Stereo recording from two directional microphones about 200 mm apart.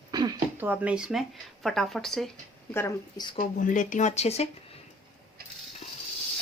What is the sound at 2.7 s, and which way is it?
Speech, 15° left (ahead or behind).